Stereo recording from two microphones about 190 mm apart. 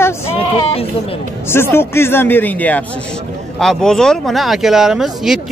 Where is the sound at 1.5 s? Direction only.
10° left (ahead or behind).